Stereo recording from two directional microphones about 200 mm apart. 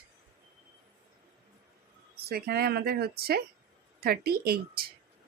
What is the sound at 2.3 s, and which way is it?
A woman's voice, 50° right (ahead or behind).